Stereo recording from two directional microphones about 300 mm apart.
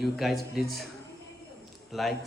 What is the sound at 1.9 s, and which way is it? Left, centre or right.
Speech, centre.